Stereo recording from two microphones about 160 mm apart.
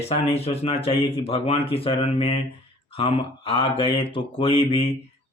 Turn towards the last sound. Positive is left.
turn(degrees=35)  # may be behind; listen again after turning